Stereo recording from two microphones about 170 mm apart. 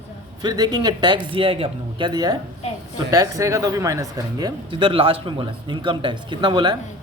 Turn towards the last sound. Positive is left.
turn(degrees=-25)  # may be behind; listen again after turning